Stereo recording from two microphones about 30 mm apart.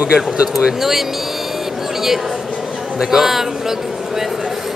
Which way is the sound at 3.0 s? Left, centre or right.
Centre.